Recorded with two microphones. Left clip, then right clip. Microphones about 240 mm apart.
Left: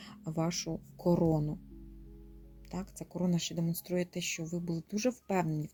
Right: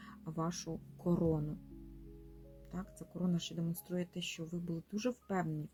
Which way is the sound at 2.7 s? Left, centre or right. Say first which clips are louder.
Left 6 dB; left.